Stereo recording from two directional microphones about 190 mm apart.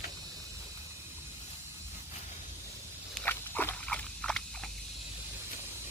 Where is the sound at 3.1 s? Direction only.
10° left (ahead or behind).